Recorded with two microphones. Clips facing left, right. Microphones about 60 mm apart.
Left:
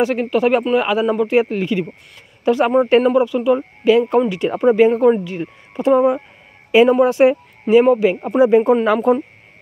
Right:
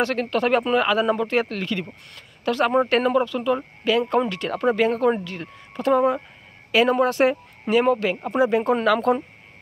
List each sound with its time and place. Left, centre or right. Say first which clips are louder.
0.0 s speech: left 6 dB; centre